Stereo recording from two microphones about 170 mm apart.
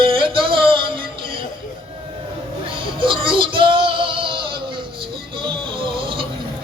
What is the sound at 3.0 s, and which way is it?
Music, 30° right (ahead or behind).